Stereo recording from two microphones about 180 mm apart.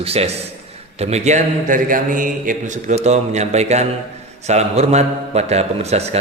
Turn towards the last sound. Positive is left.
turn(degrees=-35)  # may be behind; listen again after turning